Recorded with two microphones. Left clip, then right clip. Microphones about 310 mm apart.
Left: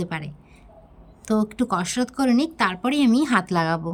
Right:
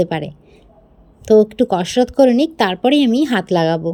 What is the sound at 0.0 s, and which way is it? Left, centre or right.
A woman's voice, centre.